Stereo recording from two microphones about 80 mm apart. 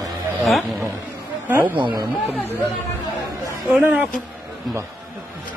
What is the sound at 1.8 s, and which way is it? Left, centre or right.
Speech, right.